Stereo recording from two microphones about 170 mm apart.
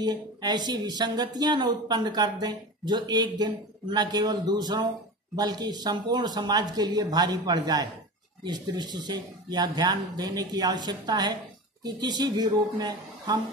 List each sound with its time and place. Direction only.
0.0 s speech: 25° right (ahead or behind)